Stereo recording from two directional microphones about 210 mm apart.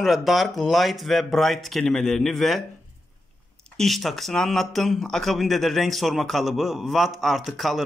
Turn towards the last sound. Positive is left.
turn(degrees=0)  # may be behind; listen again after turning